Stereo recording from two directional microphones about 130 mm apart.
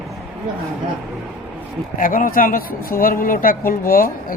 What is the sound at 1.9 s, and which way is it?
Speech, 90° left.